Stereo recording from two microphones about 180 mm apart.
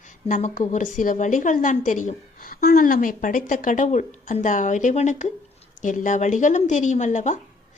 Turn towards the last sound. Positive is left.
turn(degrees=40)  # may be behind; listen again after turning